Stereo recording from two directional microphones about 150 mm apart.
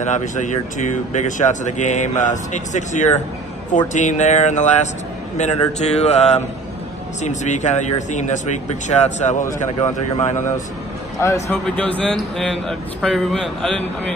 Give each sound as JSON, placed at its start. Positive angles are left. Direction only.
{"t": 0.0, "sound": "speech", "side_deg": 55}
{"t": 11.1, "sound": "a man's voice", "side_deg": 20}
{"t": 11.7, "sound": "speech", "side_deg": 5}